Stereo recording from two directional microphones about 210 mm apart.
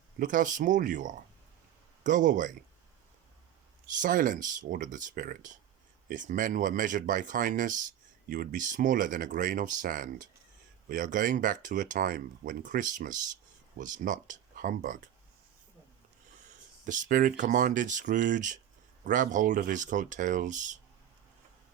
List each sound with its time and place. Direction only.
0.2 s speech: 40° right (ahead or behind)
4.0 s speech: 40° right (ahead or behind)
16.8 s speech: 40° right (ahead or behind)